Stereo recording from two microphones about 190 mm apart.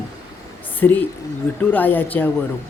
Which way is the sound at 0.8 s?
10° left (ahead or behind).